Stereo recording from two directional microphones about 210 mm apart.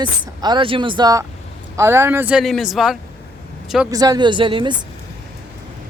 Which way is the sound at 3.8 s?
15° right (ahead or behind).